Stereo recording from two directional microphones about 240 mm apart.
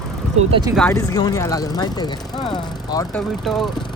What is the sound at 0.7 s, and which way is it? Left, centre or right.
Speech, centre.